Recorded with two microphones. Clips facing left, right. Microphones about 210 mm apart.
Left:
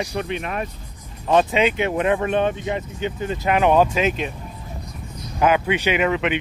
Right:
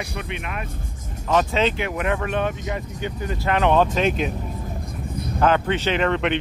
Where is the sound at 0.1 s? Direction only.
35° left (ahead or behind).